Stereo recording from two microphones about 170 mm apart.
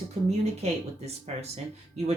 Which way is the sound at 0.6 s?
40° right (ahead or behind).